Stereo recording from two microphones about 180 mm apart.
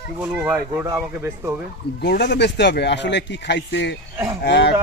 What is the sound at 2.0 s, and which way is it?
Speech, 70° left (ahead or behind).